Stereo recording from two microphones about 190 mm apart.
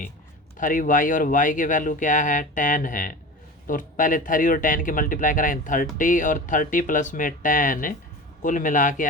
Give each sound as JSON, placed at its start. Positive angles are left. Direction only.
{"t": 0.5, "sound": "speech", "side_deg": 45}